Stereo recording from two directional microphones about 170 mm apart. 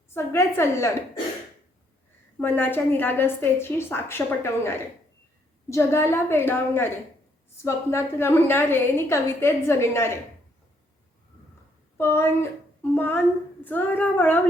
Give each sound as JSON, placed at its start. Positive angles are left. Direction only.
{"t": 0.1, "sound": "a woman's voice", "side_deg": 15}
{"t": 2.4, "sound": "a woman's voice", "side_deg": 10}
{"t": 11.9, "sound": "a woman's voice", "side_deg": 15}